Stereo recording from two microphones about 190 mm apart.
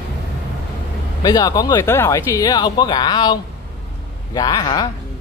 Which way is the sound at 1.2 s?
20° left (ahead or behind).